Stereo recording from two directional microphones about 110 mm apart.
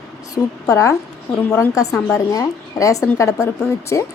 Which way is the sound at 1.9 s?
10° left (ahead or behind).